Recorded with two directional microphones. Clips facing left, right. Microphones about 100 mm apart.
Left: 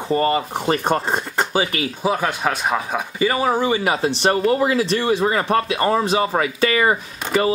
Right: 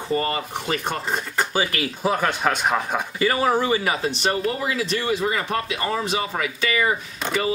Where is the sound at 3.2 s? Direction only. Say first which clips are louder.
Left 2 dB; 20° left (ahead or behind).